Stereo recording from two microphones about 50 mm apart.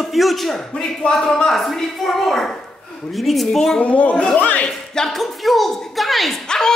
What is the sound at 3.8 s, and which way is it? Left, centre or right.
Speech, left.